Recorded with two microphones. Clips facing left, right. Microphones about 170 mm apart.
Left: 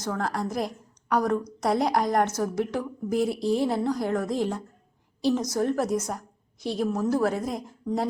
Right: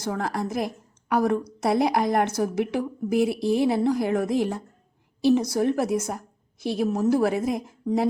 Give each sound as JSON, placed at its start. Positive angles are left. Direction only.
{"t": 0.0, "sound": "a woman's voice", "side_deg": -10}